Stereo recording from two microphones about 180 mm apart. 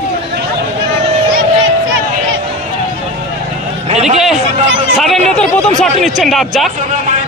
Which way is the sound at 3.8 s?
40° right (ahead or behind).